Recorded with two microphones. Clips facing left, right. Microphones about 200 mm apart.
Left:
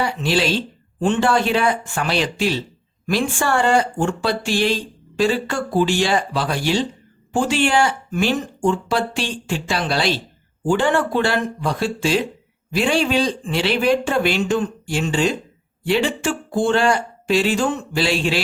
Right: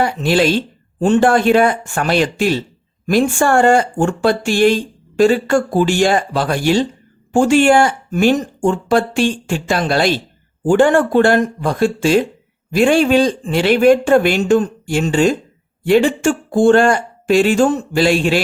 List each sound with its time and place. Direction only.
0.0 s speech: 50° right (ahead or behind)